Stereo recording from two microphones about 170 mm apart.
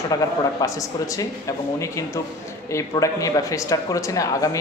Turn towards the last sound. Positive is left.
turn(degrees=20)  # may be behind; listen again after turning